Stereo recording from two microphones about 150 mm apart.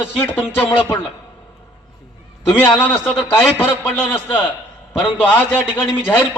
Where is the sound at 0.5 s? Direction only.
15° left (ahead or behind).